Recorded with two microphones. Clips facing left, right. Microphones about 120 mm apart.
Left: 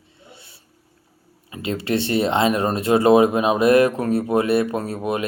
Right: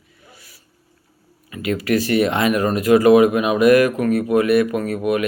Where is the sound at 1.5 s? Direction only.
30° left (ahead or behind).